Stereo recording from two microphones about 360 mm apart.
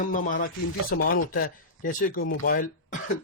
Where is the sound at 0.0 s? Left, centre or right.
Left.